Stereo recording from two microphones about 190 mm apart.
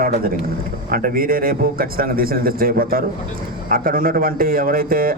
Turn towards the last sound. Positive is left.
turn(degrees=-50)  # may be behind; listen again after turning